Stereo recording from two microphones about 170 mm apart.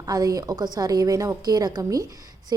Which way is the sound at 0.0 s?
20° right (ahead or behind).